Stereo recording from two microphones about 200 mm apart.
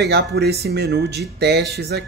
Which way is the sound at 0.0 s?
55° right (ahead or behind).